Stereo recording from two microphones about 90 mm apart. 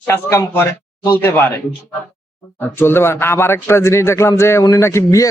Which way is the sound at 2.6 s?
25° left (ahead or behind).